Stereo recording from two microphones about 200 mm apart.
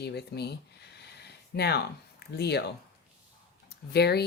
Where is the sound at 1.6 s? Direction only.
55° left (ahead or behind).